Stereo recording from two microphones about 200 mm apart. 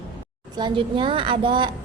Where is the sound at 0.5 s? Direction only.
25° right (ahead or behind).